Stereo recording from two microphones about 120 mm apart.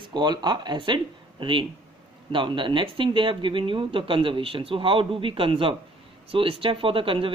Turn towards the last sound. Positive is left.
turn(degrees=-45)  # may be behind; listen again after turning